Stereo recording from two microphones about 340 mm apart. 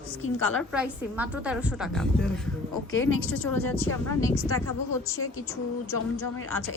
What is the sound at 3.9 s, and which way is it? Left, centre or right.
Speech, centre.